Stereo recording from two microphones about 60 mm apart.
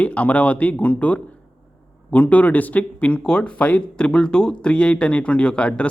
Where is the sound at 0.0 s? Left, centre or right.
Left.